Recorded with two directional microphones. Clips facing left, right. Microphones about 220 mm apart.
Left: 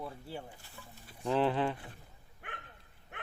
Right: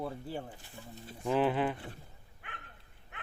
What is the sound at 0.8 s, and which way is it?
Livestock, 35° right (ahead or behind).